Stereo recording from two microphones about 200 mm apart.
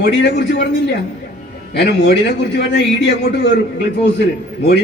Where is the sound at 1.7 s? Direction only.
60° left (ahead or behind).